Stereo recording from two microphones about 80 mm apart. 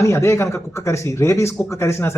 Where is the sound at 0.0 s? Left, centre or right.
Left.